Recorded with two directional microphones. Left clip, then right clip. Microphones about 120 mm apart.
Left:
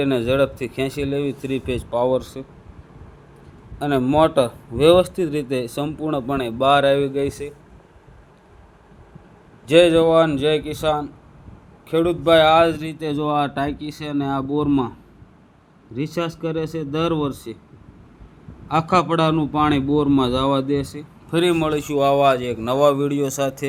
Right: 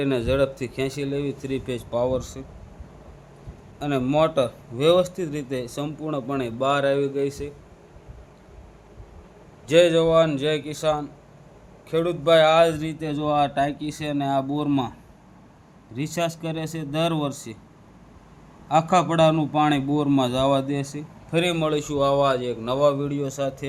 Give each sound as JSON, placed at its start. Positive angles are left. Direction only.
{"t": 0.0, "sound": "speech", "side_deg": 15}
{"t": 3.8, "sound": "a man's voice", "side_deg": 20}
{"t": 9.6, "sound": "a man's voice", "side_deg": 20}
{"t": 16.0, "sound": "a man's voice", "side_deg": 0}
{"t": 18.7, "sound": "a man's voice", "side_deg": 5}
{"t": 21.5, "sound": "a man's voice", "side_deg": 0}
{"t": 21.9, "sound": "speech", "side_deg": 10}
{"t": 22.3, "sound": "a man's voice", "side_deg": 25}